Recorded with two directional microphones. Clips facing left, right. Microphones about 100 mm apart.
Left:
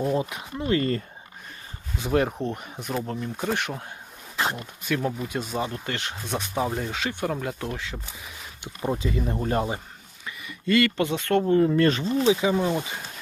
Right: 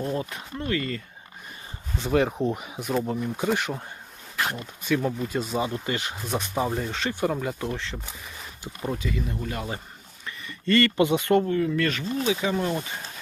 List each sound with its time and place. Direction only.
0.0 s speech: 20° left (ahead or behind)
0.7 s speech: 35° left (ahead or behind)
2.0 s speech: 5° left (ahead or behind)
8.8 s speech: 25° left (ahead or behind)
10.2 s a sound: 5° left (ahead or behind)
10.9 s speech: 10° right (ahead or behind)
11.4 s speech: 30° left (ahead or behind)
12.4 s speech: 15° left (ahead or behind)